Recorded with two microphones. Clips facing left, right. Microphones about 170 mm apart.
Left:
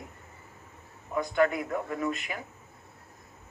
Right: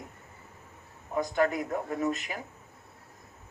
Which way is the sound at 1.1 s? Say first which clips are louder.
Left 1 dB; 40° right (ahead or behind).